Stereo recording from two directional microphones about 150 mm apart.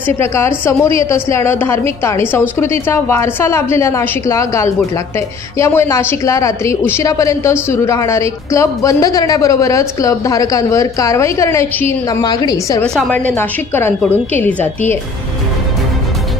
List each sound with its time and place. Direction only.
0.0 s a woman's voice: 15° left (ahead or behind)
12.8 s a woman's voice: 5° left (ahead or behind)